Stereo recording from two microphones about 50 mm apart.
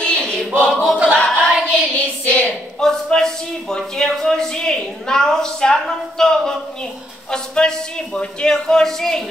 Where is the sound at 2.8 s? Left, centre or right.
Centre.